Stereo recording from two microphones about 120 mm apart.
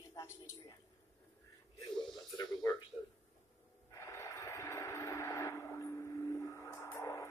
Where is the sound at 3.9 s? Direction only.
25° left (ahead or behind).